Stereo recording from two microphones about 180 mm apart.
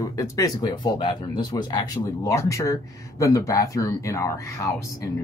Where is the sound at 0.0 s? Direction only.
20° left (ahead or behind).